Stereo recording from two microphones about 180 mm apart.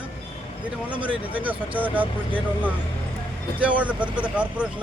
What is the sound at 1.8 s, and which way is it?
Speech, 10° right (ahead or behind).